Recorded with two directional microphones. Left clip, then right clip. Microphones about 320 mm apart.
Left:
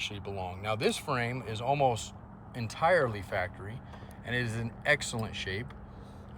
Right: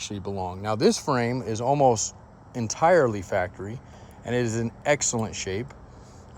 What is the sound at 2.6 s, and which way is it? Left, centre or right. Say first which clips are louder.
Speech: right 7 dB; centre.